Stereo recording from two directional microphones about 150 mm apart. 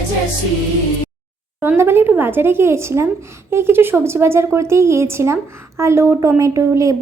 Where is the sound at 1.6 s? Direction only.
15° right (ahead or behind).